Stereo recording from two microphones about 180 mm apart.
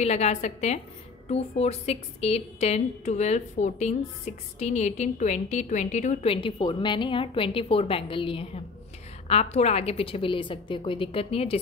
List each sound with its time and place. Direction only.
0.0 s a woman's voice: 35° left (ahead or behind)